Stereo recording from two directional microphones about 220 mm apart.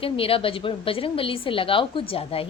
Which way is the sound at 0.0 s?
25° left (ahead or behind).